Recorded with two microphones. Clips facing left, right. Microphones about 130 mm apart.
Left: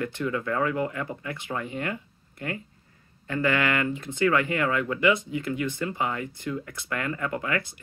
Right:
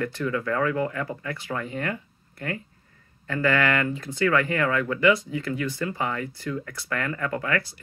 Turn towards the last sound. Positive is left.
turn(degrees=20)  # may be behind; listen again after turning